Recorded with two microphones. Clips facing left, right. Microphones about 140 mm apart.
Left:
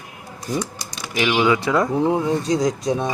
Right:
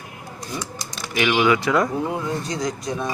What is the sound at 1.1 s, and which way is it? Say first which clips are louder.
Speech: even; 20° left (ahead or behind).